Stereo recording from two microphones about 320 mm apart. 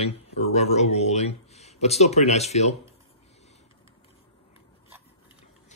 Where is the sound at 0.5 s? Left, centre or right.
Centre.